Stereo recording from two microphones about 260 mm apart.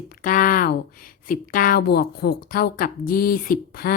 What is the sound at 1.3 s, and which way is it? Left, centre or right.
A woman's voice, left.